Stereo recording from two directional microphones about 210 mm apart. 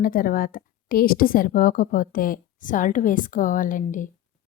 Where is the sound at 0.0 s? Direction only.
40° left (ahead or behind).